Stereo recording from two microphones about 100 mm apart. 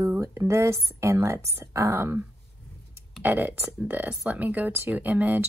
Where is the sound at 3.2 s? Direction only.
20° right (ahead or behind).